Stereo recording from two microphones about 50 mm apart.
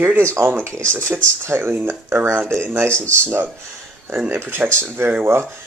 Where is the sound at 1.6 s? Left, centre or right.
Right.